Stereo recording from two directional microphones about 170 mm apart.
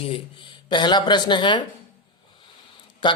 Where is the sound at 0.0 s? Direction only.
30° left (ahead or behind).